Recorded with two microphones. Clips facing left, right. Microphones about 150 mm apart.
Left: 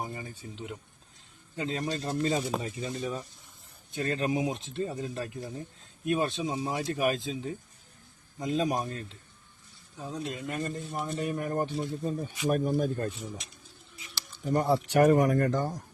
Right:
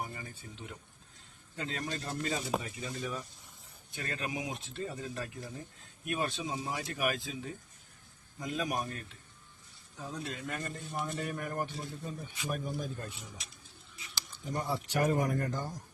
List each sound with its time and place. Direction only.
0.0 s a sound: 25° left (ahead or behind)
1.5 s speech: 20° left (ahead or behind)
12.5 s speech: 50° left (ahead or behind)
14.4 s speech: 65° left (ahead or behind)